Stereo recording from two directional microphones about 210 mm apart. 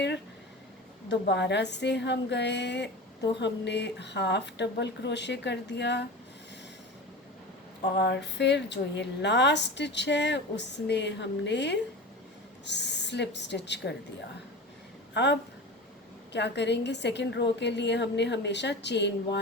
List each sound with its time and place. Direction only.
1.0 s a woman's voice: 55° left (ahead or behind)
7.9 s a woman's voice: 50° left (ahead or behind)
15.1 s a woman's voice: 55° left (ahead or behind)